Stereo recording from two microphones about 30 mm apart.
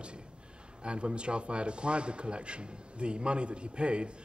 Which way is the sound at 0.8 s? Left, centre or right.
Right.